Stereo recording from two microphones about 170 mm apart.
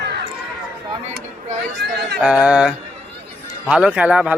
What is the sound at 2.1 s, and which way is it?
Speech, 5° right (ahead or behind).